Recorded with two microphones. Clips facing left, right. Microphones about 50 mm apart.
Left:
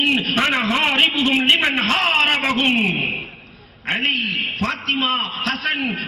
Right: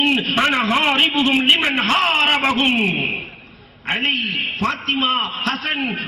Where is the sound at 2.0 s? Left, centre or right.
Centre.